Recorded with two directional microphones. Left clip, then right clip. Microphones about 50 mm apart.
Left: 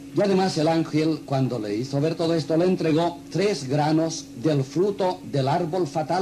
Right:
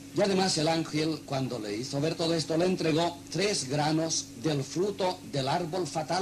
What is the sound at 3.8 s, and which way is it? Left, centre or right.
A man's voice, left.